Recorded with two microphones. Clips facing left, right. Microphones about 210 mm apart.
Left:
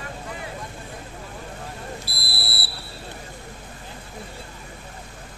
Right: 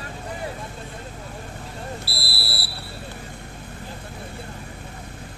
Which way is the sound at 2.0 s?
20° left (ahead or behind).